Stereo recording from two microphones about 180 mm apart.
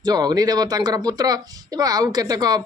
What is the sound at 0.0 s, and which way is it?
Speech, 20° right (ahead or behind).